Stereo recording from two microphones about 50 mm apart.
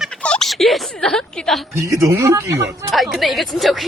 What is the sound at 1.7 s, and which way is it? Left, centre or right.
Speech, right.